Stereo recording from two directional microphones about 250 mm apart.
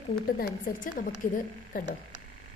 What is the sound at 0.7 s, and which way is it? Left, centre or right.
Speech, left.